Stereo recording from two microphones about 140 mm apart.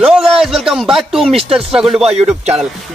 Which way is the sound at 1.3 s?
45° right (ahead or behind).